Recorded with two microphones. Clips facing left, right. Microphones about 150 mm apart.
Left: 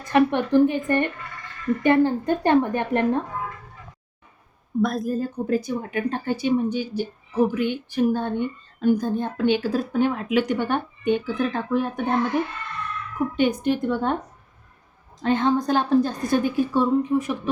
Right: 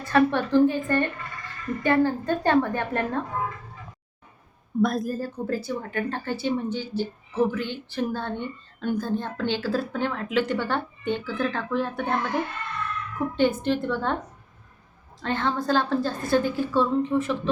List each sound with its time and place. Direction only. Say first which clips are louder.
0.0 s a woman's voice: left 2 dB; 15° left (ahead or behind)
4.8 s a woman's voice: even; centre (ahead or behind)
5.1 s speech: left 5 dB; 20° left (ahead or behind)
13.3 s speech: left 1 dB; 15° left (ahead or behind)
15.2 s speech: left 6 dB; 15° left (ahead or behind)